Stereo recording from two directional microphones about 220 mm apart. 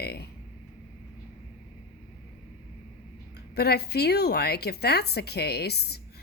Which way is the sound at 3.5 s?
45° left (ahead or behind).